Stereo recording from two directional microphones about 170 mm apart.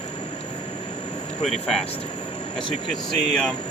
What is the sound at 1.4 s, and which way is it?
Speech, 40° left (ahead or behind).